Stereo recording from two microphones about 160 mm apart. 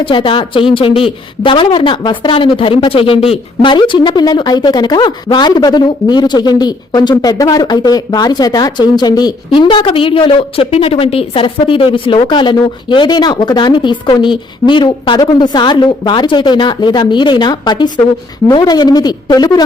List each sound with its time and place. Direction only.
0.0 s a woman's voice: 30° left (ahead or behind)